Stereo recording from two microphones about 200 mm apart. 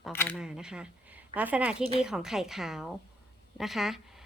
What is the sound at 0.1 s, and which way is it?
Speech, 10° left (ahead or behind).